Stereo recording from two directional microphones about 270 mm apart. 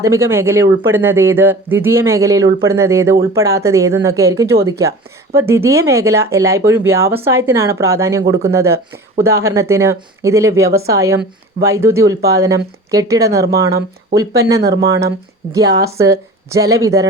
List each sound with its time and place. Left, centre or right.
0.0 s speech: centre
14.6 s speech: right
15.5 s speech: centre